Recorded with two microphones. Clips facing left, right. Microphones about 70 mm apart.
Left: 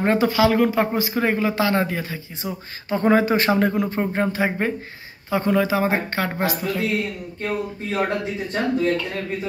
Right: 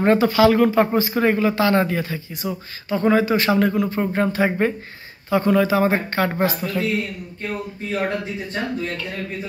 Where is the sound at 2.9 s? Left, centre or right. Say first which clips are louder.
Even; left.